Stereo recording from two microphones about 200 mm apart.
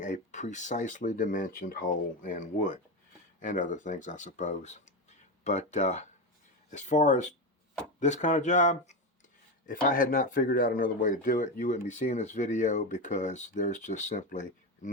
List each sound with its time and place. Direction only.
0.0 s speech: 40° left (ahead or behind)